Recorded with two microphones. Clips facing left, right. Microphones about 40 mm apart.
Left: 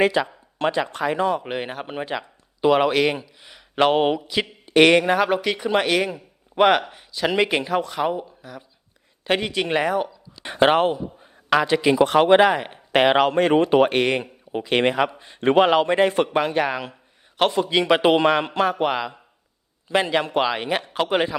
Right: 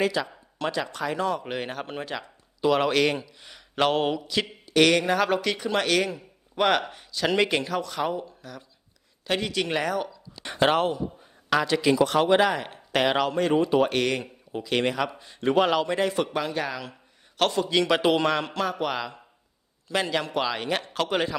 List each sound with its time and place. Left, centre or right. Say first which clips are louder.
0.0 s a man's voice: left 6 dB; left
4.6 s speech: left 6 dB; left
5.2 s a man's voice: left 3 dB; centre
9.2 s a man's voice: left 4 dB; left
13.9 s a man's voice: left 5 dB; left
17.3 s speech: left 3 dB; left